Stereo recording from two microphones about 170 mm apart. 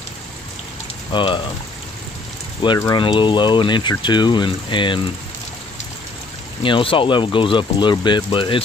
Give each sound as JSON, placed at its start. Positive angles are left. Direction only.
{"t": 1.1, "sound": "speech", "side_deg": 30}
{"t": 2.8, "sound": "speech", "side_deg": 25}
{"t": 6.6, "sound": "speech", "side_deg": 30}